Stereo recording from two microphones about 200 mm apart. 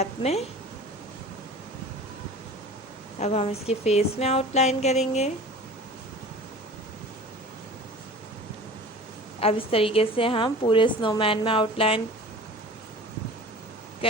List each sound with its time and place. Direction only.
0.0 s speech: 30° left (ahead or behind)
3.2 s a woman's voice: 30° left (ahead or behind)
9.4 s a woman's voice: 30° left (ahead or behind)
14.0 s a sound: 25° left (ahead or behind)